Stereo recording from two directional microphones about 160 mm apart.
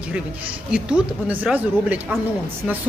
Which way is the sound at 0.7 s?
5° right (ahead or behind).